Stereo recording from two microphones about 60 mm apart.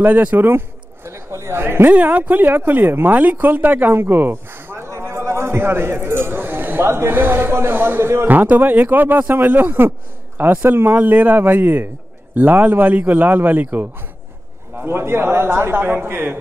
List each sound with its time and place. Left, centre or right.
0.0 s a man's voice: right
0.5 s a sound: right
2.0 s speech: right
8.3 s a man's voice: right
14.8 s a man's voice: right